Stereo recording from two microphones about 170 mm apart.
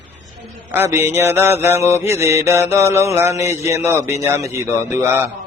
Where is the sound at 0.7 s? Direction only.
15° right (ahead or behind).